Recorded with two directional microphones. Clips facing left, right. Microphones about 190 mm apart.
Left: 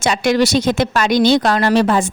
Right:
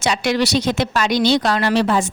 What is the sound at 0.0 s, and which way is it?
Speech, 50° left (ahead or behind).